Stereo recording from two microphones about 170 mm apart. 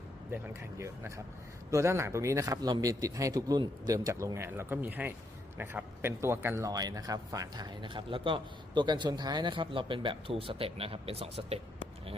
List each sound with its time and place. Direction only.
0.8 s speech: 15° right (ahead or behind); by 11.6 s 35° right (ahead or behind)